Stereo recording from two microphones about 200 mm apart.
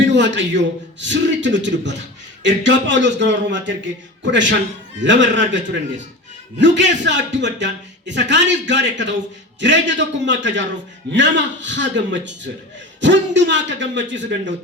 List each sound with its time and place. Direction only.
0.1 s a man's voice: 65° right (ahead or behind)
6.6 s a man's voice: 65° right (ahead or behind)